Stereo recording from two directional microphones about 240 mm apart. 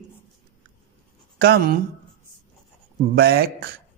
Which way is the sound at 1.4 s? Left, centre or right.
Right.